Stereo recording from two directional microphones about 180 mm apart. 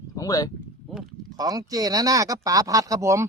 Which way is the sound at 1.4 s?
20° right (ahead or behind).